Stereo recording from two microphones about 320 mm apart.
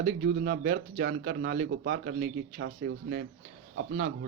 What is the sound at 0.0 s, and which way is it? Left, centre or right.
Speech, right.